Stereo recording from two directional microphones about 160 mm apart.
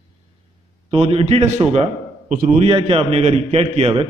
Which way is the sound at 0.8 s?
35° right (ahead or behind).